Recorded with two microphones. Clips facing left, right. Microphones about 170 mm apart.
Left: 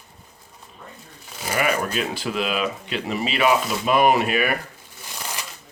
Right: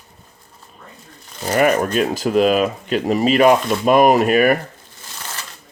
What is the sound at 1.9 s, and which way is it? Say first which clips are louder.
Speech: right 9 dB; 45° right (ahead or behind).